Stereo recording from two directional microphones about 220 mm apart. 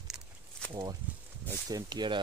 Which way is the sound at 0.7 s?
20° right (ahead or behind).